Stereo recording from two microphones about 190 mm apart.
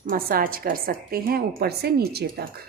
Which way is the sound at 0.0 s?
50° right (ahead or behind).